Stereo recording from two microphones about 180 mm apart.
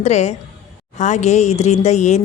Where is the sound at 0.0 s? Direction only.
40° left (ahead or behind).